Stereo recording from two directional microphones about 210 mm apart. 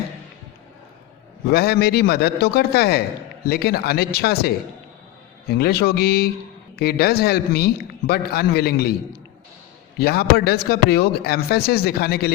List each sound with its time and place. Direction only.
1.5 s speech: 50° left (ahead or behind)
10.0 s speech: 50° left (ahead or behind)